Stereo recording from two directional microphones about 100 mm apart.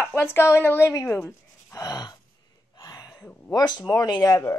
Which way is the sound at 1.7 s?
40° left (ahead or behind).